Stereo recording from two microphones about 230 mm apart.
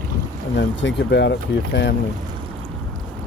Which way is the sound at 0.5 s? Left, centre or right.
Left.